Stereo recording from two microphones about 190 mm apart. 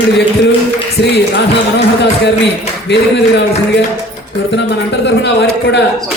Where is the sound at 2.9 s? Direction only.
65° left (ahead or behind).